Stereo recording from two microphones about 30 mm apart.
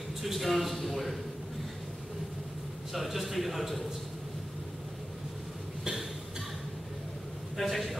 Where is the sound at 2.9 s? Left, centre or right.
Centre.